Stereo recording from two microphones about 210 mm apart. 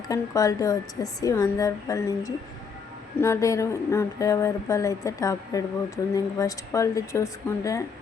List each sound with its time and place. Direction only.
0.1 s speech: 15° left (ahead or behind)